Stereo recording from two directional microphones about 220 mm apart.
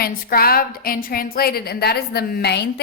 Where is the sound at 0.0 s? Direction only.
45° left (ahead or behind).